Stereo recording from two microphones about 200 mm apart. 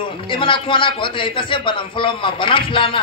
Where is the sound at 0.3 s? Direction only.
25° left (ahead or behind).